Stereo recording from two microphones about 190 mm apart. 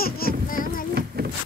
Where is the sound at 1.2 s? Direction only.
55° right (ahead or behind).